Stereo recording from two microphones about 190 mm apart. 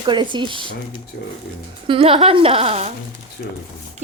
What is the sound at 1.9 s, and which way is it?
Speech, 30° right (ahead or behind).